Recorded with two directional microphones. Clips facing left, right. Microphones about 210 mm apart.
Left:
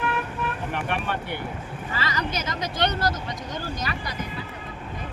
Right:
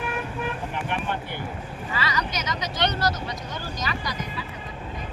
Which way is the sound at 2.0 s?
50° left (ahead or behind).